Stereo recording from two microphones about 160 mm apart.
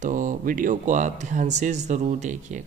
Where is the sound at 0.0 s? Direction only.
55° right (ahead or behind).